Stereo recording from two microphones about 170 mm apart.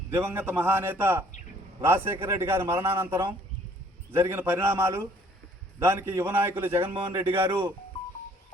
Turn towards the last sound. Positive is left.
turn(degrees=-15)  # may be behind; listen again after turning